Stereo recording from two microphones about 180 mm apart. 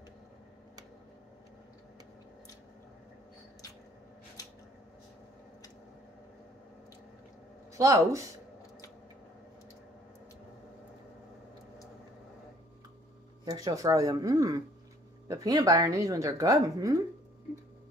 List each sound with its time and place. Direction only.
7.7 s speech: 15° right (ahead or behind)
13.5 s a woman's voice: 20° right (ahead or behind)